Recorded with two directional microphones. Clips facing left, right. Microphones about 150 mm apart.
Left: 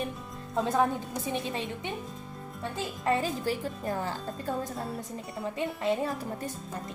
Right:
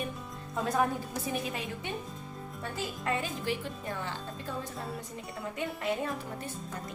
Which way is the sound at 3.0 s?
35° left (ahead or behind).